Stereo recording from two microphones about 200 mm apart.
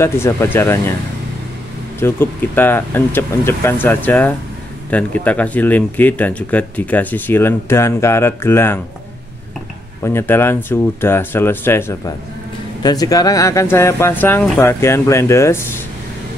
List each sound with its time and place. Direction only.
0.0 s speech: 15° left (ahead or behind)
2.0 s speech: 10° left (ahead or behind)
10.0 s speech: 10° left (ahead or behind)